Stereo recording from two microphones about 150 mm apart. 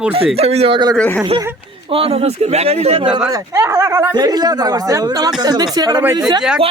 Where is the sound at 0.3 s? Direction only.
45° right (ahead or behind).